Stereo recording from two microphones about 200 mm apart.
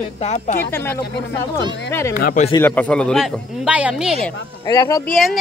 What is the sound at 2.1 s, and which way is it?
Speech, 45° left (ahead or behind).